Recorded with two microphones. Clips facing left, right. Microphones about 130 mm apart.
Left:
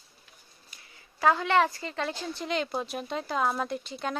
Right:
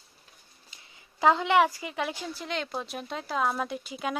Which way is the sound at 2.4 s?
Centre (ahead or behind).